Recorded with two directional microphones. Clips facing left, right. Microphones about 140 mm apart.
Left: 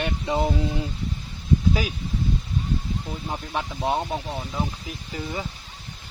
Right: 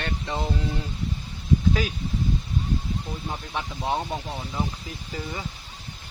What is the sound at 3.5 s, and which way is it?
Speech, 10° left (ahead or behind).